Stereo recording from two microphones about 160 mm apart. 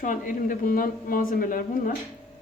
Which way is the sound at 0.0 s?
55° left (ahead or behind).